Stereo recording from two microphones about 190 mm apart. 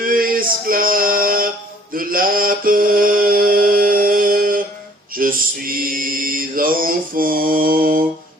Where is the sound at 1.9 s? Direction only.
50° right (ahead or behind).